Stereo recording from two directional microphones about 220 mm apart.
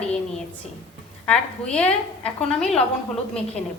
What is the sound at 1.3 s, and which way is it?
A woman's voice, 5° left (ahead or behind).